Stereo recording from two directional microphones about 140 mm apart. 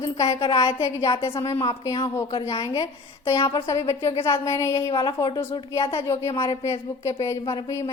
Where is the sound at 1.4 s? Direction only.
30° left (ahead or behind).